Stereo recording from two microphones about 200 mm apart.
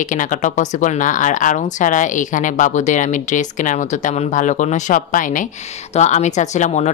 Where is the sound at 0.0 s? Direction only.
40° left (ahead or behind).